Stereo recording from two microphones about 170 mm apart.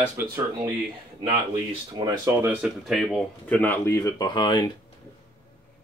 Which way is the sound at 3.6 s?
15° left (ahead or behind).